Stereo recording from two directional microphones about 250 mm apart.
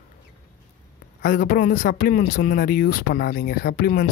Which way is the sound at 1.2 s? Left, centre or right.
Left.